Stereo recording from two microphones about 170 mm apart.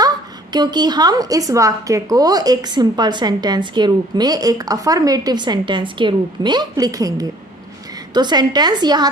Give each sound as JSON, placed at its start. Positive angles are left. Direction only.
{"t": 0.5, "sound": "speech", "side_deg": -25}